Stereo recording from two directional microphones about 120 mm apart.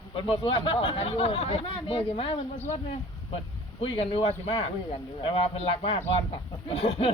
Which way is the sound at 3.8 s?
50° left (ahead or behind).